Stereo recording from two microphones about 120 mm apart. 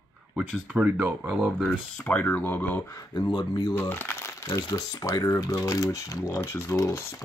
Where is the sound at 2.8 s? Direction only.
30° left (ahead or behind).